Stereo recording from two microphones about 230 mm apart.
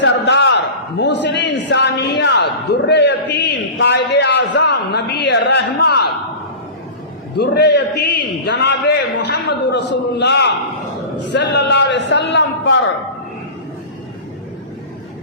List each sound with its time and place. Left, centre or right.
0.0 s a man's voice: left
7.3 s a man's voice: left